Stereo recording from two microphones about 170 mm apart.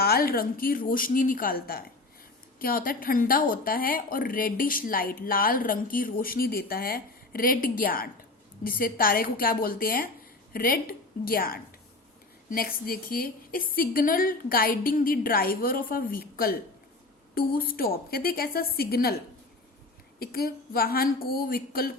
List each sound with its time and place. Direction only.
0.0 s a woman's voice: 65° left (ahead or behind)
20.1 s speech: 65° left (ahead or behind)